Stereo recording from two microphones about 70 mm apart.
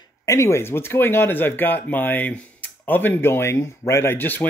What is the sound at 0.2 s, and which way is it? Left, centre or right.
Speech, left.